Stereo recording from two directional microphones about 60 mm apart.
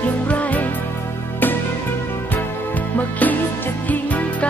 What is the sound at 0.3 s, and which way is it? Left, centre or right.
Music, left.